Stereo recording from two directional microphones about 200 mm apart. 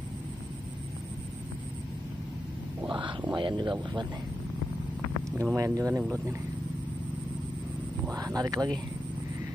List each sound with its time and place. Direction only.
2.9 s a sound: 25° right (ahead or behind)
3.3 s speech: 25° right (ahead or behind)
5.3 s speech: 10° right (ahead or behind)
8.0 s speech: 15° right (ahead or behind)